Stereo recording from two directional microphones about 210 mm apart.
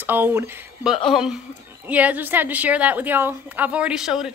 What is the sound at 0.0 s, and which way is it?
A woman's voice, 10° right (ahead or behind).